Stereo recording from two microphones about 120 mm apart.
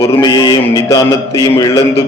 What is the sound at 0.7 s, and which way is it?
A man's voice, 30° left (ahead or behind).